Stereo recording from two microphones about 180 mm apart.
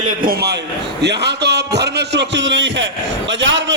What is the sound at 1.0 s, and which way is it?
A man's voice, 70° right (ahead or behind).